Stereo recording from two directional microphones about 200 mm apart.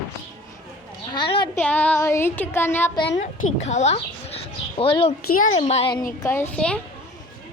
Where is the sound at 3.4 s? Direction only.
90° left.